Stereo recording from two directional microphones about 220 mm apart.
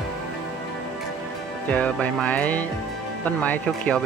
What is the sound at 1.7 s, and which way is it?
Speech, 5° left (ahead or behind).